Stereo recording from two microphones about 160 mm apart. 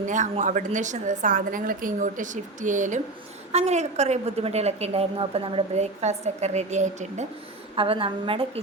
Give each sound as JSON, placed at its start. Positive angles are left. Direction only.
{"t": 0.0, "sound": "a woman's voice", "side_deg": -50}
{"t": 7.8, "sound": "a woman's voice", "side_deg": -35}